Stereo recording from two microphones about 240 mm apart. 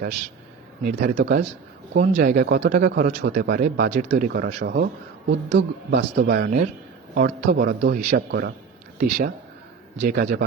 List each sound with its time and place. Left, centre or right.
0.9 s a man's voice: right